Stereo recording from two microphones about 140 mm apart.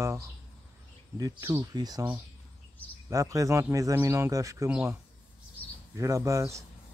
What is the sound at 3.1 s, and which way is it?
Speech, 20° right (ahead or behind).